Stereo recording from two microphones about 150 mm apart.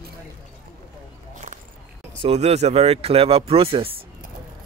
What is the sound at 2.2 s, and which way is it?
Speech, 45° right (ahead or behind).